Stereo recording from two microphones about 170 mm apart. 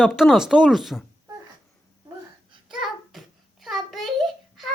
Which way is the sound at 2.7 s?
Centre (ahead or behind).